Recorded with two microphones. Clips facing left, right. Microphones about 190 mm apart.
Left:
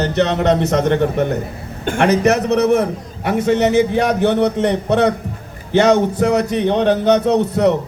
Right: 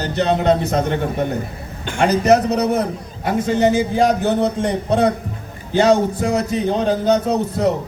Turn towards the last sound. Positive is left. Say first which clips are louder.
# left 4 dB
turn(degrees=70)  # may be behind; listen again after turning